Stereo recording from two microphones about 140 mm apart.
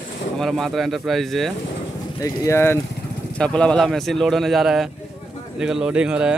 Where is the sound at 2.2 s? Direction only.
20° left (ahead or behind).